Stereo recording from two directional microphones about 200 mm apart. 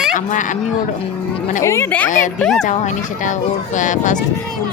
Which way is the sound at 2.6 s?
40° left (ahead or behind).